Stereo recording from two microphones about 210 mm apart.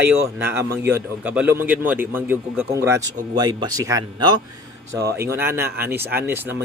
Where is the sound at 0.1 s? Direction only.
10° right (ahead or behind).